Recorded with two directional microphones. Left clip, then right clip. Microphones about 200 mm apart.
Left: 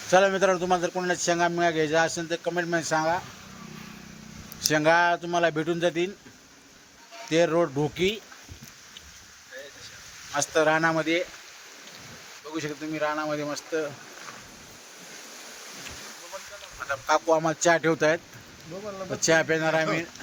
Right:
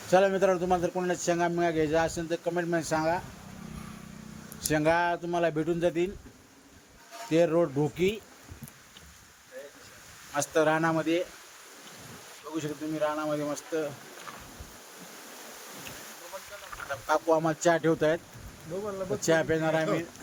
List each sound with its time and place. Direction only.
0.1 s a man's voice: 5° left (ahead or behind)
4.6 s a man's voice: 5° left (ahead or behind)
7.3 s a man's voice: 5° left (ahead or behind)
10.3 s speech: 5° left (ahead or behind)
12.5 s speech: 10° left (ahead or behind)
16.9 s speech: 10° left (ahead or behind)
19.2 s speech: 5° left (ahead or behind)